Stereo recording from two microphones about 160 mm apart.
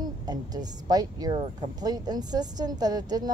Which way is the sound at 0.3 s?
25° right (ahead or behind).